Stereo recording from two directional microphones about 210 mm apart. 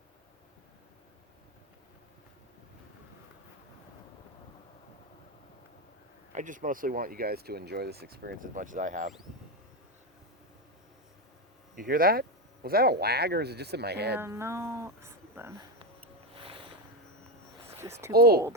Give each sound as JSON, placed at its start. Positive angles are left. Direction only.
{"t": 6.3, "sound": "speech", "side_deg": -35}
{"t": 11.8, "sound": "speech", "side_deg": -45}
{"t": 14.2, "sound": "speech", "side_deg": -10}
{"t": 16.3, "sound": "boat", "side_deg": -25}
{"t": 17.7, "sound": "speech", "side_deg": -10}
{"t": 18.1, "sound": "speech", "side_deg": -50}